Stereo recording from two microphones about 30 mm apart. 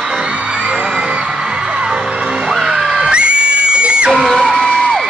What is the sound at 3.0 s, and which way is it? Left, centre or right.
Music, right.